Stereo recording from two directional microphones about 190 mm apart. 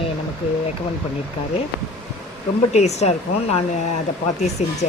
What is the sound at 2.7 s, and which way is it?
Speech, 35° left (ahead or behind).